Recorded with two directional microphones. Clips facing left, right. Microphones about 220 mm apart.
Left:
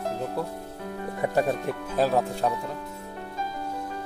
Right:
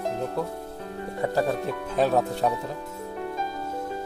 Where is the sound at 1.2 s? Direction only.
15° left (ahead or behind).